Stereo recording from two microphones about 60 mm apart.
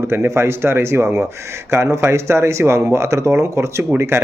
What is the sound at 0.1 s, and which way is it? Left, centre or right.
Speech, right.